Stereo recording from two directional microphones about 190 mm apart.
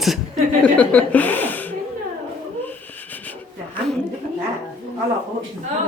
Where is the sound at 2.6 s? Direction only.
10° left (ahead or behind).